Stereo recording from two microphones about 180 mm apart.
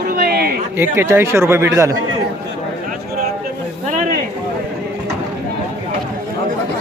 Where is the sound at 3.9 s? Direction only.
40° right (ahead or behind).